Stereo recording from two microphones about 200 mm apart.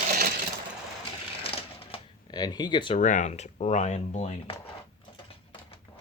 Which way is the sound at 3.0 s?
40° left (ahead or behind).